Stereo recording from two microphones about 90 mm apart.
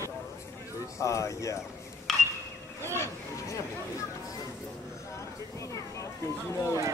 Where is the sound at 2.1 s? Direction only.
Centre (ahead or behind).